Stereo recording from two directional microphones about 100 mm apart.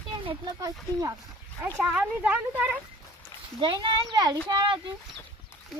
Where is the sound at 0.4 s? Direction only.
40° right (ahead or behind).